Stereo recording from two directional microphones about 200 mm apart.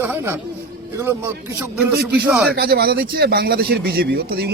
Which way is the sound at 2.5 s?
50° right (ahead or behind).